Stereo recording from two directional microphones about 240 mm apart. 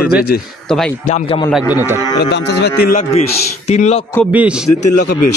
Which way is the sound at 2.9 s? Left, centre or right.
Left.